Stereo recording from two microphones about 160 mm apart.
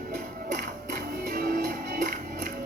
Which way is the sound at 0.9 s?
65° right (ahead or behind).